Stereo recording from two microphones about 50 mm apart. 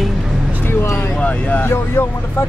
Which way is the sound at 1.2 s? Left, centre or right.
Left.